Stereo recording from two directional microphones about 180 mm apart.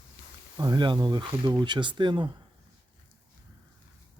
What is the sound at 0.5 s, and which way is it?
Speech, 25° right (ahead or behind).